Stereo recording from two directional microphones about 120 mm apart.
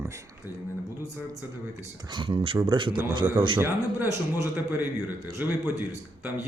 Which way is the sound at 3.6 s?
20° right (ahead or behind).